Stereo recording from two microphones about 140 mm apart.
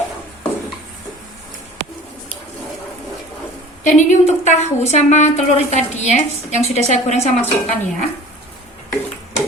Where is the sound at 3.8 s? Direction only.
55° left (ahead or behind).